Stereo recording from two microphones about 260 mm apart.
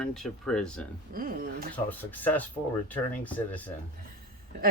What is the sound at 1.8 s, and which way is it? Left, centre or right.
Speech, centre.